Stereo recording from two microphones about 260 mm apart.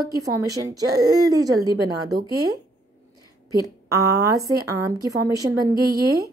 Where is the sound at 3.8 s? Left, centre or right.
Centre.